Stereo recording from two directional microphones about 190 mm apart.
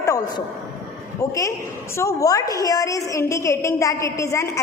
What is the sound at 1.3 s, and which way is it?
A woman's voice, 15° left (ahead or behind).